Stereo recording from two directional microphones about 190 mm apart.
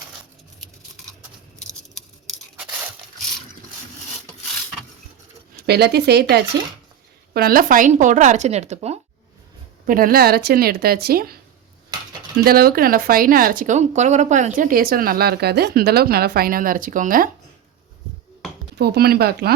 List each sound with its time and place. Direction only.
5.6 s speech: 55° right (ahead or behind); by 9.0 s 35° right (ahead or behind)
9.8 s speech: 50° right (ahead or behind)
12.5 s speech: 50° right (ahead or behind)
18.8 s speech: 55° right (ahead or behind)